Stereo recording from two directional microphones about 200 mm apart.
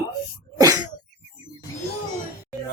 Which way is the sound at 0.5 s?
20° right (ahead or behind).